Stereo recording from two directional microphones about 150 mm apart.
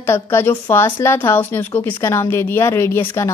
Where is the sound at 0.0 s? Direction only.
15° left (ahead or behind).